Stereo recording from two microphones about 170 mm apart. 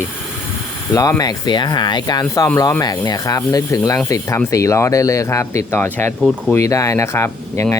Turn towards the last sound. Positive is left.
turn(degrees=15)  # may be behind; listen again after turning